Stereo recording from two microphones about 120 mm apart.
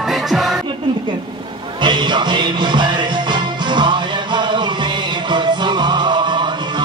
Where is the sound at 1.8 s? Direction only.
40° right (ahead or behind).